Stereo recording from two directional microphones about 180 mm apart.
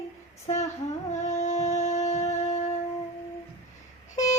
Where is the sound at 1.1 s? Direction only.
40° left (ahead or behind).